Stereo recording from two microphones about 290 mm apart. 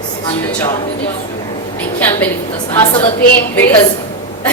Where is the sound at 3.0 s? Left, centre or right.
Left.